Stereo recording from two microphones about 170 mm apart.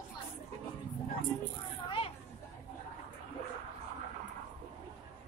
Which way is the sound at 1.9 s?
30° left (ahead or behind).